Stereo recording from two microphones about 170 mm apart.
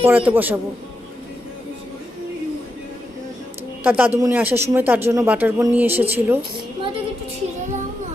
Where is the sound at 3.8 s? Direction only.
10° right (ahead or behind).